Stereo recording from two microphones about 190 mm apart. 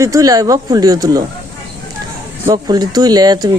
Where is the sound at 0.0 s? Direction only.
15° right (ahead or behind).